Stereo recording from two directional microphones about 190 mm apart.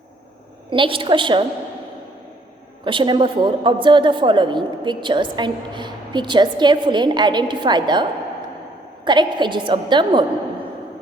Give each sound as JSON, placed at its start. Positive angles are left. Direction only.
{"t": 0.7, "sound": "a woman's voice", "side_deg": -25}
{"t": 2.8, "sound": "a woman's voice", "side_deg": -25}
{"t": 9.0, "sound": "a woman's voice", "side_deg": -25}